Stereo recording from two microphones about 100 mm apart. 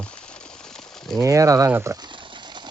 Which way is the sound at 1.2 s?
35° right (ahead or behind).